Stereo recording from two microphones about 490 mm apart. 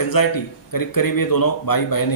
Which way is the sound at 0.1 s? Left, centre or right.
Left.